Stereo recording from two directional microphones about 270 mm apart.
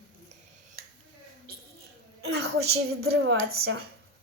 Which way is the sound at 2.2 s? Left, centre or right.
Right.